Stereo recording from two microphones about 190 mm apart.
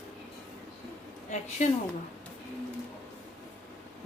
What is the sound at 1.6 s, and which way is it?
Speech, 40° left (ahead or behind).